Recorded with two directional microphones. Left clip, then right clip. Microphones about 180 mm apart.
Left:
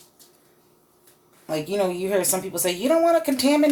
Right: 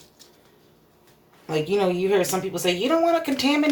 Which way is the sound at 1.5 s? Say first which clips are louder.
Right 2 dB; 30° left (ahead or behind).